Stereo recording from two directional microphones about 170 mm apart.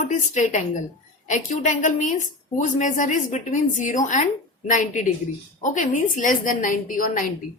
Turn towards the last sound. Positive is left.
turn(degrees=50)  # may be behind; listen again after turning